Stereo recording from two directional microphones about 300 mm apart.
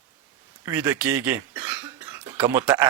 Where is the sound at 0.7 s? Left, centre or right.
Centre.